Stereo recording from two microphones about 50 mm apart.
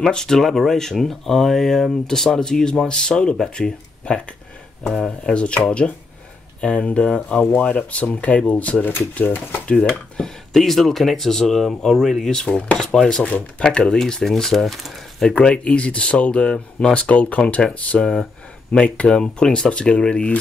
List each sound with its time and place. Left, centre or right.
0.0 s speech: centre
6.6 s speech: left
10.1 s speech: centre
12.4 s speech: left
12.7 s speech: centre
18.0 s speech: centre
18.7 s speech: centre